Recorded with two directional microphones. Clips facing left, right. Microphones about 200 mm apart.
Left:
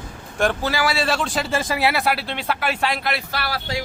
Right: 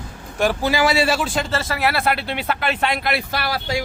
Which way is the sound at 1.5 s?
15° left (ahead or behind).